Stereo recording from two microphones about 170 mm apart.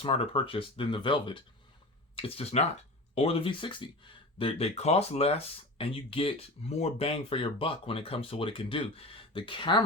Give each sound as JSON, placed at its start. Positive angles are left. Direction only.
{"t": 0.0, "sound": "speech", "side_deg": 35}